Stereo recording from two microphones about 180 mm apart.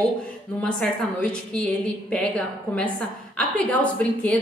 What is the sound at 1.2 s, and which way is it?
A woman's voice, 5° left (ahead or behind).